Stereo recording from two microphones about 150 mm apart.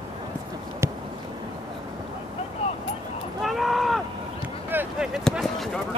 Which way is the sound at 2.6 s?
40° left (ahead or behind).